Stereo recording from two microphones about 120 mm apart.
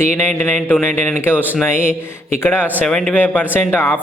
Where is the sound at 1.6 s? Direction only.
20° left (ahead or behind).